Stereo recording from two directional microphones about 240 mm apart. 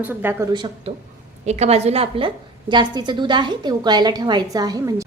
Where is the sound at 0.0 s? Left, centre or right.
Centre.